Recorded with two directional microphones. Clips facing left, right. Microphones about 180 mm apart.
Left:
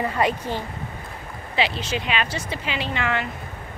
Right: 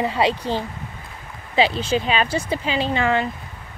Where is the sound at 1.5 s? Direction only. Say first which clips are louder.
Right 6 dB; 35° right (ahead or behind).